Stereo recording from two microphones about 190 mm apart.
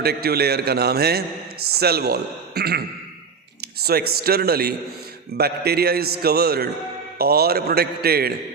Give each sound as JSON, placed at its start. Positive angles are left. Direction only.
{"t": 0.0, "sound": "a man's voice", "side_deg": -55}